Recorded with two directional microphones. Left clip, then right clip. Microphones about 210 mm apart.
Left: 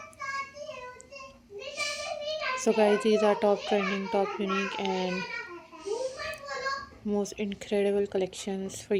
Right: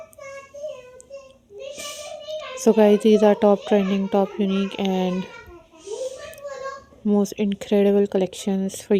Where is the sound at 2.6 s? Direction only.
55° right (ahead or behind).